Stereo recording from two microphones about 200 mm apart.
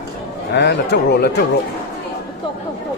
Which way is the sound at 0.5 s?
60° left (ahead or behind).